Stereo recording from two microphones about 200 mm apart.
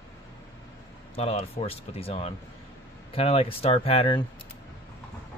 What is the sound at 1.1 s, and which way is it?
Speech, 30° left (ahead or behind).